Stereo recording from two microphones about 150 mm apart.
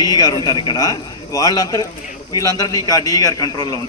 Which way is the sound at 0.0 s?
25° left (ahead or behind).